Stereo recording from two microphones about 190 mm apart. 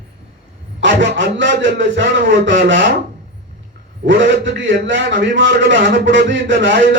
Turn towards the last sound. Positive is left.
turn(degrees=-75)  # may be behind; listen again after turning